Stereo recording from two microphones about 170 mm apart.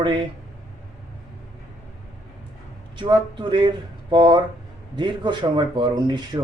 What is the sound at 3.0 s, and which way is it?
Speech, 30° right (ahead or behind).